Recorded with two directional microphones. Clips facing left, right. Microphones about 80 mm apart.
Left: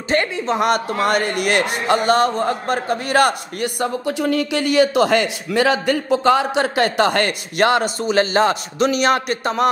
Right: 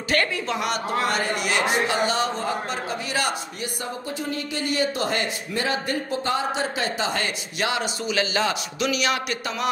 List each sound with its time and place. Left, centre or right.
0.1 s a woman's voice: left
0.6 s speech: left